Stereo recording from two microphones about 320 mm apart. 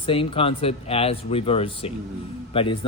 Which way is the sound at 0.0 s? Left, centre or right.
Centre.